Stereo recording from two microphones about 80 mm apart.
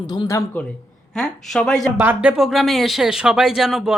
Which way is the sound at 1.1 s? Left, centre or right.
Centre.